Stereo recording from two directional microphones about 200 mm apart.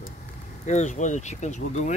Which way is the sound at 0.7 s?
35° left (ahead or behind).